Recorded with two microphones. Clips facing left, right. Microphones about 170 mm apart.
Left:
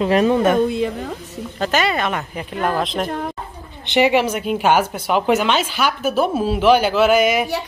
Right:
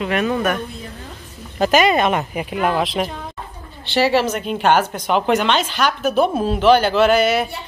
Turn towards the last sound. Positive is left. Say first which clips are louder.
# even
turn(degrees=10)  # may be behind; listen again after turning